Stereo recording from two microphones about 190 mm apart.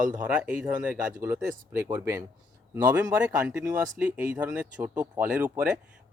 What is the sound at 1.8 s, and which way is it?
Speech, 15° right (ahead or behind).